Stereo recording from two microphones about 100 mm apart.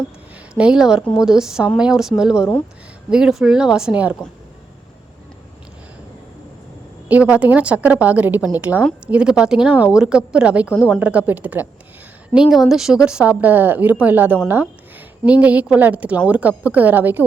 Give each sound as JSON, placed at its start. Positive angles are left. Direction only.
{"t": 0.5, "sound": "a woman's voice", "side_deg": -10}
{"t": 7.1, "sound": "a woman's voice", "side_deg": -15}